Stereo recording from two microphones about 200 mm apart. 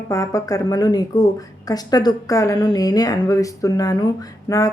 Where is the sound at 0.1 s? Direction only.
15° left (ahead or behind).